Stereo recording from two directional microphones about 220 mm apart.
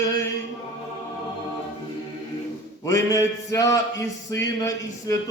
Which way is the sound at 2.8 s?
15° left (ahead or behind).